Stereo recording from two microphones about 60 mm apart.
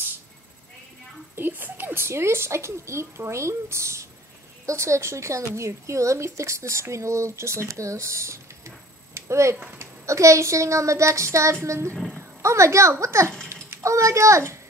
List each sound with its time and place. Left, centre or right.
1.3 s a woman's voice: right
12.2 s a sound: right
13.0 s a woman's voice: right